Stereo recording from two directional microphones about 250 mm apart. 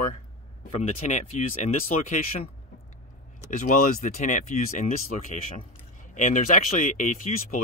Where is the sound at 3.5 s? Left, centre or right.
Left.